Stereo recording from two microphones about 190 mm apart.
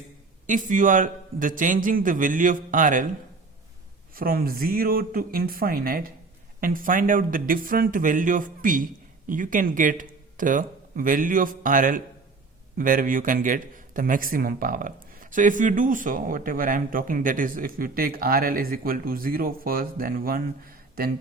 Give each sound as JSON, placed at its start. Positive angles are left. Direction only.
{"t": 0.4, "sound": "a man's voice", "side_deg": -45}
{"t": 4.1, "sound": "a man's voice", "side_deg": -50}